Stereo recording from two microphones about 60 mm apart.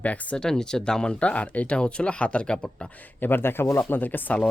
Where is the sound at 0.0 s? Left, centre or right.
Left.